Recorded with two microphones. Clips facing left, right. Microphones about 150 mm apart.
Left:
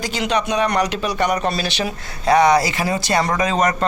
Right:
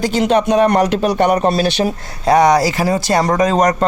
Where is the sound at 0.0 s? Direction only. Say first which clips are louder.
Right 7 dB; 50° right (ahead or behind).